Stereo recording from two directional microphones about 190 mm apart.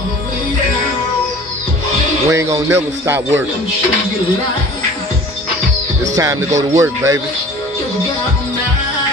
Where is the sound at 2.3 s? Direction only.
15° right (ahead or behind).